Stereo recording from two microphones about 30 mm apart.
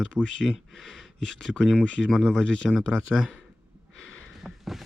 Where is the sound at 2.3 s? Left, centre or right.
Left.